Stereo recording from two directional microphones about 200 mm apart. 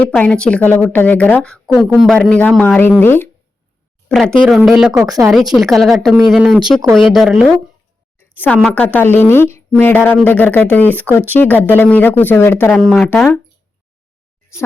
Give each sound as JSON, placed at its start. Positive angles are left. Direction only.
{"t": 0.0, "sound": "speech", "side_deg": 5}
{"t": 4.1, "sound": "speech", "side_deg": 0}
{"t": 4.9, "sound": "speech", "side_deg": -15}
{"t": 5.3, "sound": "speech", "side_deg": 0}
{"t": 8.7, "sound": "speech", "side_deg": 10}
{"t": 12.7, "sound": "speech", "side_deg": 0}